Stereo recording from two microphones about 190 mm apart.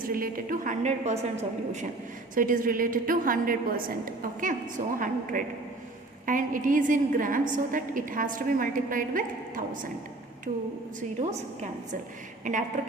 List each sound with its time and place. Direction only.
0.0 s a woman's voice: 50° right (ahead or behind)
6.2 s a woman's voice: 45° right (ahead or behind)
11.2 s a woman's voice: 35° right (ahead or behind)